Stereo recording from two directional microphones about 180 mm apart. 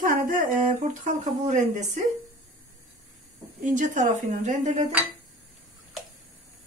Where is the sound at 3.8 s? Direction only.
45° right (ahead or behind).